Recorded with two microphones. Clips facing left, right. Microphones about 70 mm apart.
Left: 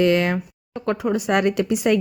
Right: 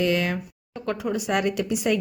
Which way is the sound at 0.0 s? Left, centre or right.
Left.